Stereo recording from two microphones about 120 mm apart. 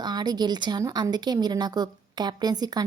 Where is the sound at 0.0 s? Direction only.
35° right (ahead or behind).